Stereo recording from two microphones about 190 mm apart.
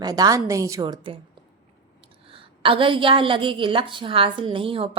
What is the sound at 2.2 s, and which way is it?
Speech, 30° right (ahead or behind).